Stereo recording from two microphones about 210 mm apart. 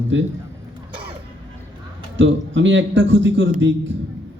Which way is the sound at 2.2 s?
60° right (ahead or behind).